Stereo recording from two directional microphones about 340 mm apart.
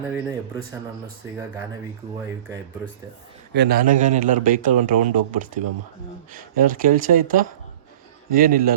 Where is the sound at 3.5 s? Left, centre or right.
Right.